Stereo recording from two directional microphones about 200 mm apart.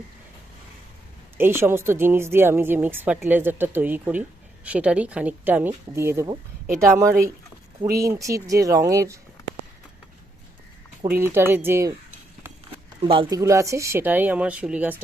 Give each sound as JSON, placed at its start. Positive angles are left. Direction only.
{"t": 1.4, "sound": "speech", "side_deg": -10}
{"t": 11.2, "sound": "speech", "side_deg": -10}
{"t": 13.0, "sound": "speech", "side_deg": -25}